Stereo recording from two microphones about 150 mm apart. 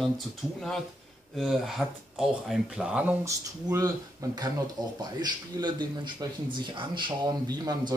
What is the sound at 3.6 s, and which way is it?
Speech, 25° right (ahead or behind).